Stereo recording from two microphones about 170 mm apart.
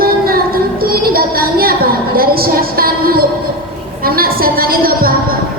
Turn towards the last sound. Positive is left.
turn(degrees=-60)  # may be behind; listen again after turning